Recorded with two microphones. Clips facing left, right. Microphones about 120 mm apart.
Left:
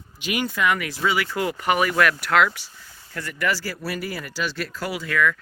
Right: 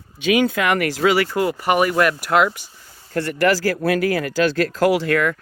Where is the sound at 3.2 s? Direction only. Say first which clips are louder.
Right 8 dB; 80° right; by 5.3 s 60° right (ahead or behind).